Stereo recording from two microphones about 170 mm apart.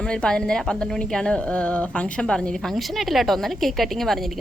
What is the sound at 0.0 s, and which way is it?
A woman's voice, 5° left (ahead or behind).